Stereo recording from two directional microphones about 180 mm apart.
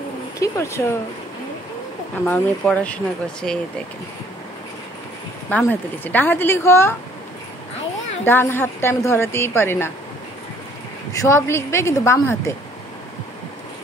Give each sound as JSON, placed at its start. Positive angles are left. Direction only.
{"t": 0.4, "sound": "a woman's voice", "side_deg": 15}
{"t": 2.2, "sound": "a woman's voice", "side_deg": 10}
{"t": 5.5, "sound": "a woman's voice", "side_deg": 10}
{"t": 8.3, "sound": "a woman's voice", "side_deg": 10}
{"t": 11.1, "sound": "a woman's voice", "side_deg": 15}